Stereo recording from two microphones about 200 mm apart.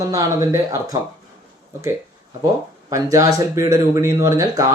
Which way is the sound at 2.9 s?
15° right (ahead or behind).